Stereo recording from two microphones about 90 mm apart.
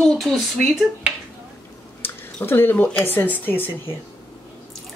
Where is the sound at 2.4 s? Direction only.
25° left (ahead or behind).